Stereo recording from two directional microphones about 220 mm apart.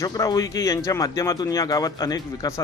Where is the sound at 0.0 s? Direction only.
15° left (ahead or behind).